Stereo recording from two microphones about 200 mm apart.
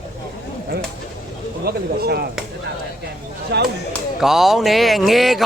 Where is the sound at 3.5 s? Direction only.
55° right (ahead or behind).